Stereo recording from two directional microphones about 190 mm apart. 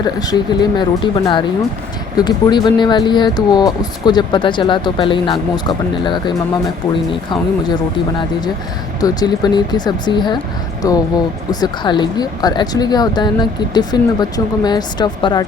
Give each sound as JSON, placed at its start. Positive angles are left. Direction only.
{"t": 0.0, "sound": "speech", "side_deg": 20}
{"t": 9.0, "sound": "speech", "side_deg": 20}